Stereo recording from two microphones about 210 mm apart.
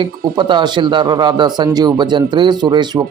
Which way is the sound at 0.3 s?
20° right (ahead or behind).